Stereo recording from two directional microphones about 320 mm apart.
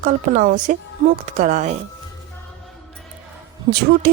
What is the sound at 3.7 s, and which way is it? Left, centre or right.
Speech, right.